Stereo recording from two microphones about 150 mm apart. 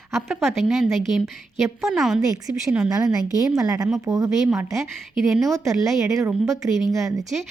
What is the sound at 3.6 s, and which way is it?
Speech, 25° right (ahead or behind).